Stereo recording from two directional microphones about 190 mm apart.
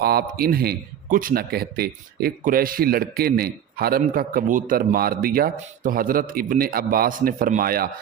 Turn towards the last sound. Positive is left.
turn(degrees=-50)  # may be behind; listen again after turning